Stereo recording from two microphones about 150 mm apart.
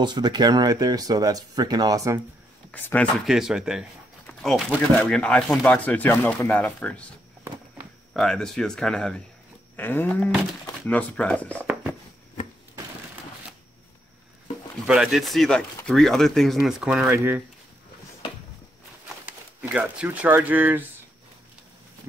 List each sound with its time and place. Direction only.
0.0 s speech: 30° right (ahead or behind)
2.7 s speech: 10° left (ahead or behind)
3.3 s speech: 5° right (ahead or behind)
8.1 s speech: 5° left (ahead or behind)
14.9 s speech: 5° right (ahead or behind)
17.1 s speech: 15° right (ahead or behind)
19.6 s speech: 10° right (ahead or behind)